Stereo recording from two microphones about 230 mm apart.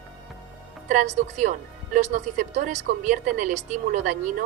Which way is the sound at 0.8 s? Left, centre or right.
Right.